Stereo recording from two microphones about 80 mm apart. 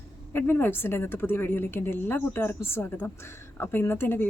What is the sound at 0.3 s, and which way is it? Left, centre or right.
A woman's voice, left.